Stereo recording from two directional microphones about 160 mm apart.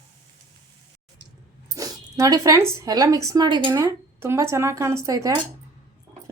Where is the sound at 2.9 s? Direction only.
20° right (ahead or behind).